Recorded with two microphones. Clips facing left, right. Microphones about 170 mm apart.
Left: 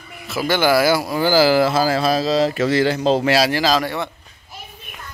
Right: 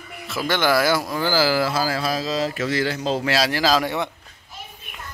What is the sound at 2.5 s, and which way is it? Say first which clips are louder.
Speech: left 6 dB; 30° left (ahead or behind).